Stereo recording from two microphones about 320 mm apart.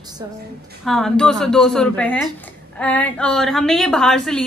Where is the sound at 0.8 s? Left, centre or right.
Centre.